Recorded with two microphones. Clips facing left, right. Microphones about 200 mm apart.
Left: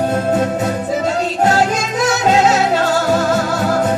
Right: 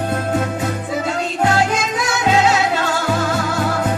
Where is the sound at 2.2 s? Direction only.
40° left (ahead or behind).